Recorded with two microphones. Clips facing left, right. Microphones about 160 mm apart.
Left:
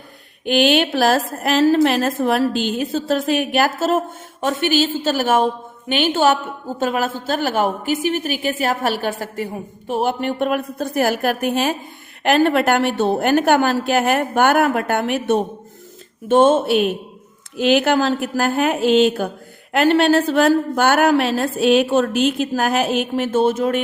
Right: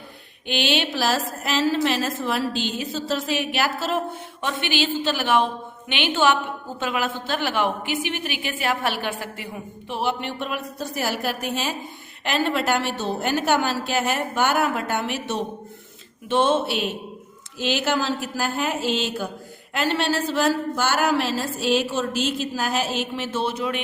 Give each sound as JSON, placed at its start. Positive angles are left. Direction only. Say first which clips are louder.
{"t": 0.4, "sound": "a woman's voice", "louder": "left 8 dB", "side_deg": 50}